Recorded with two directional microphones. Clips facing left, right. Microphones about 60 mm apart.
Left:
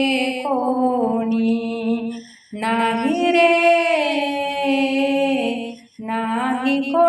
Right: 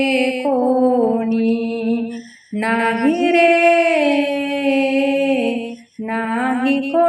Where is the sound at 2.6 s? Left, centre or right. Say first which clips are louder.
Right 2 dB; right.